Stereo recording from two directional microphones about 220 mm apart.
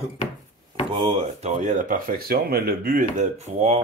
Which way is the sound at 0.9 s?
25° right (ahead or behind).